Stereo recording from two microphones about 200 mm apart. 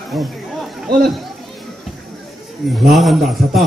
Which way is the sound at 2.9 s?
Centre (ahead or behind).